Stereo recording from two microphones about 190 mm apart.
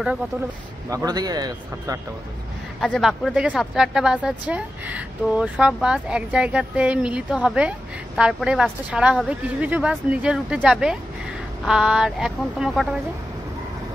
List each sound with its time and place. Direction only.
0.8 s speech: 20° right (ahead or behind)
2.8 s speech: centre (ahead or behind)